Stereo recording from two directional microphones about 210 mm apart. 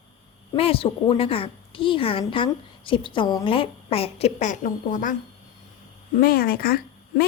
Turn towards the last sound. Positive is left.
turn(degrees=45)  # may be behind; listen again after turning